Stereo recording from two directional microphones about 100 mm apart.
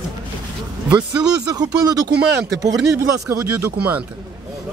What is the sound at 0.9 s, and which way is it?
Speech, 40° right (ahead or behind).